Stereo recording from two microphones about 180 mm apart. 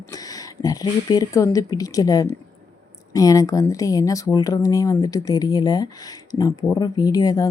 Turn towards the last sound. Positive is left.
turn(degrees=20)  # may be behind; listen again after turning